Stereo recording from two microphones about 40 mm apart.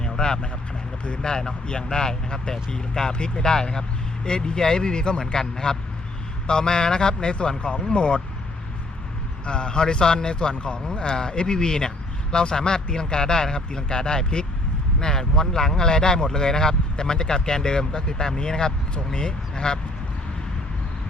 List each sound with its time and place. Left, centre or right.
0.0 s speech: centre
9.5 s speech: left